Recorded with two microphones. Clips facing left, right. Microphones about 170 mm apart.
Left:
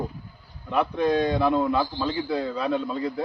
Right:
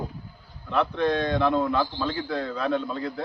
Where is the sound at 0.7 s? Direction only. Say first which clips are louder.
Left 1 dB; 10° left (ahead or behind).